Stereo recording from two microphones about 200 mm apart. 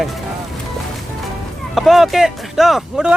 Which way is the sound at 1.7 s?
Centre (ahead or behind).